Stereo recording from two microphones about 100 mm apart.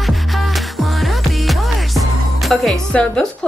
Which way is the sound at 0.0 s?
Centre (ahead or behind).